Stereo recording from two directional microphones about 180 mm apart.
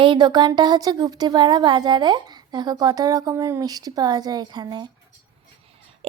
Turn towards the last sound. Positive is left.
turn(degrees=-25)  # may be behind; listen again after turning